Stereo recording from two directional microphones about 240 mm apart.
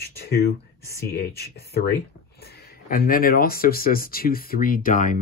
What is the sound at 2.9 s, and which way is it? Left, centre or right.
Speech, left.